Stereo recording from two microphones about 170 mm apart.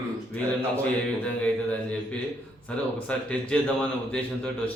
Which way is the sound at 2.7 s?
5° left (ahead or behind).